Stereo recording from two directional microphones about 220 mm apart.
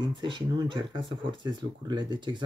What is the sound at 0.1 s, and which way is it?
Speech, 20° right (ahead or behind).